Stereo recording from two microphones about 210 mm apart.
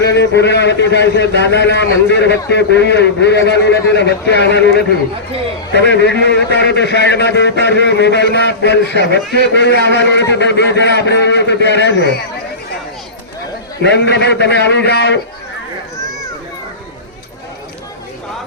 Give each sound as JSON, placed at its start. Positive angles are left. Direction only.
{"t": 0.0, "sound": "a man's voice", "side_deg": 55}
{"t": 13.8, "sound": "a man's voice", "side_deg": 55}